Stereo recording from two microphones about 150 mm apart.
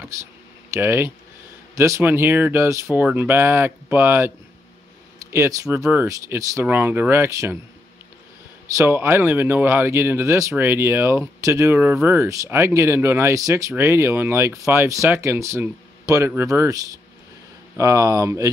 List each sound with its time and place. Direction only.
0.7 s speech: 15° right (ahead or behind)
5.3 s speech: 20° right (ahead or behind)
8.7 s speech: 15° right (ahead or behind)